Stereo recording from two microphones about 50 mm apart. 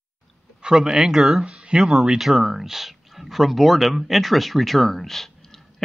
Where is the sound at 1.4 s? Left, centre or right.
Centre.